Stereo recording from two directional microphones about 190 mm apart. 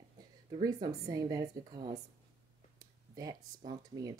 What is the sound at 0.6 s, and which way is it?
Speech, 20° right (ahead or behind).